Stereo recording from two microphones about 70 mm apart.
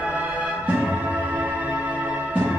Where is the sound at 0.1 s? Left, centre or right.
Right.